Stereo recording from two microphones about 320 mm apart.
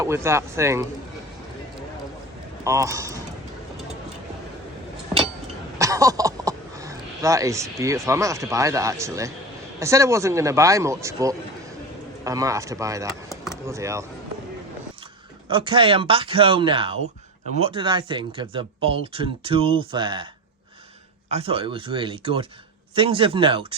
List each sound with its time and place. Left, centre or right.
0.0 s speech: centre
2.6 s speech: centre
5.8 s speech: centre
15.4 s speech: centre
21.2 s speech: centre